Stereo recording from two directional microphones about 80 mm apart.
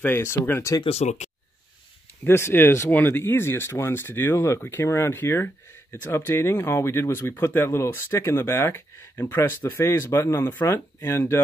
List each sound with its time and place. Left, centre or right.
0.0 s speech: left
2.2 s speech: left